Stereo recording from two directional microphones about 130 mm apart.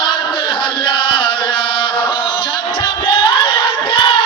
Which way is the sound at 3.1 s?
40° left (ahead or behind).